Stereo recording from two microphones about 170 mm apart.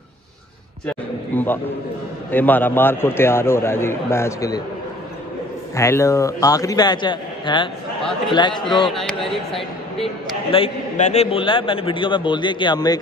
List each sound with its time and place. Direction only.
1.3 s a man's voice: 10° left (ahead or behind)
5.8 s a man's voice: 15° left (ahead or behind)
8.9 s speech: centre (ahead or behind)
10.5 s a man's voice: 40° left (ahead or behind)